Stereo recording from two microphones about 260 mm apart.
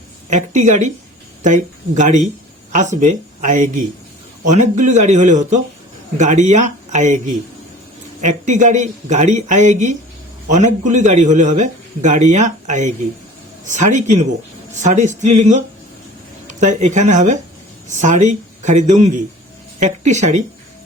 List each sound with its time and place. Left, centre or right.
0.3 s a man's voice: right
8.2 s a man's voice: right